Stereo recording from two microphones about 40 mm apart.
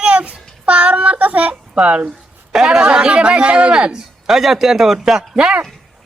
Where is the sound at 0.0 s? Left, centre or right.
Right.